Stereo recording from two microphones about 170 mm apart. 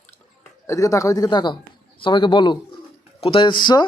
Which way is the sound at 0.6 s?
20° left (ahead or behind).